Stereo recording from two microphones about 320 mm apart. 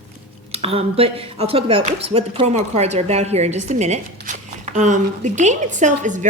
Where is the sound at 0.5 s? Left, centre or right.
Centre.